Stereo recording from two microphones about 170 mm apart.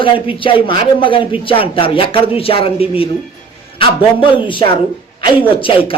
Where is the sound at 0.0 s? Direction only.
30° left (ahead or behind).